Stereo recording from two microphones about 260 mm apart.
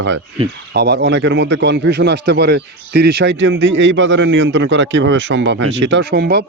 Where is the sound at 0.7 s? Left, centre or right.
Right.